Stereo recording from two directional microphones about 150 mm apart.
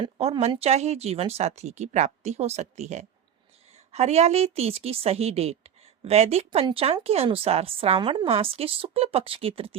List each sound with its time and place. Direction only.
0.0 s a woman's voice: 45° right (ahead or behind)